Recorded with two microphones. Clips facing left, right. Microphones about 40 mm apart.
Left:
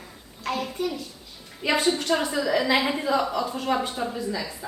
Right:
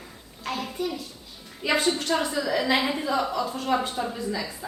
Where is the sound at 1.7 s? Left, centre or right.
Centre.